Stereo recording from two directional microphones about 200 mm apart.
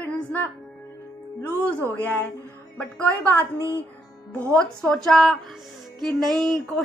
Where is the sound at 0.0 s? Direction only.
10° left (ahead or behind).